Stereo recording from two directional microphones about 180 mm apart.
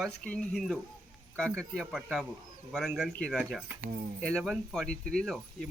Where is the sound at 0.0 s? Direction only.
5° left (ahead or behind).